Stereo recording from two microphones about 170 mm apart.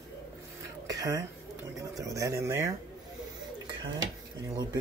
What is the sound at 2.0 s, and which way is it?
Speech, 20° right (ahead or behind).